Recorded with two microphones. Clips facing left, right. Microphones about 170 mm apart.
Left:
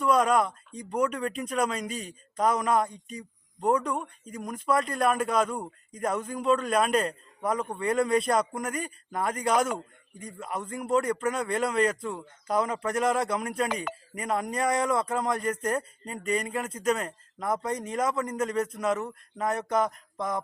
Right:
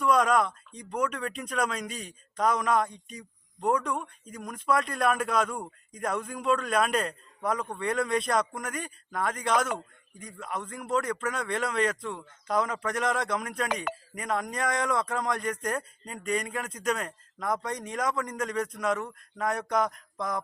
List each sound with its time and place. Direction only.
0.0 s a man's voice: 5° left (ahead or behind)